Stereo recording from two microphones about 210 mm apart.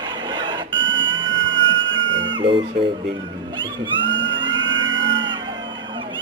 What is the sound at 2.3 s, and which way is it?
Speech, 25° right (ahead or behind).